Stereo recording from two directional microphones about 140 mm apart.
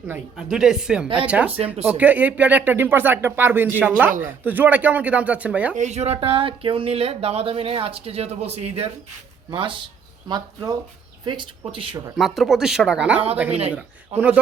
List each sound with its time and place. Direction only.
0.3 s speech: 5° right (ahead or behind)
1.5 s speech: 45° right (ahead or behind)
1.8 s speech: 10° right (ahead or behind)
5.7 s speech: 55° right (ahead or behind)
6.1 s speech: 40° right (ahead or behind)
9.5 s speech: 35° right (ahead or behind)
12.1 s speech: centre (ahead or behind)
13.5 s speech: 45° right (ahead or behind)